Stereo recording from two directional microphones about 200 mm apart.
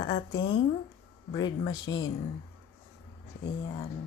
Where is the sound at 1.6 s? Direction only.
20° left (ahead or behind).